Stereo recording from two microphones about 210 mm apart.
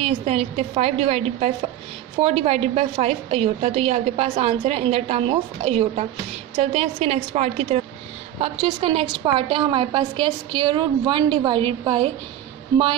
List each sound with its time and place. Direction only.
0.0 s a woman's voice: 30° right (ahead or behind)